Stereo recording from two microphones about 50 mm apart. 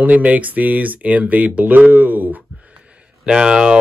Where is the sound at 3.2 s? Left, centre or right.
Centre.